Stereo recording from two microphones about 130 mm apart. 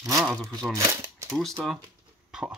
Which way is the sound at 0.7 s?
25° right (ahead or behind).